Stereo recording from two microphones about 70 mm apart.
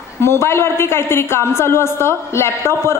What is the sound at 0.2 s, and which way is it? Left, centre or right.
A man's voice, left.